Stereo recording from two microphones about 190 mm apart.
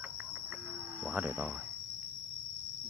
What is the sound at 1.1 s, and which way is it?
Speech, 5° right (ahead or behind).